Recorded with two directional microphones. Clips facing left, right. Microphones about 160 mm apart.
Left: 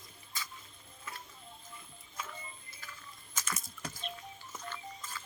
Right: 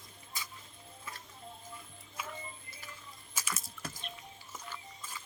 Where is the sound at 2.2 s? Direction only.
10° right (ahead or behind).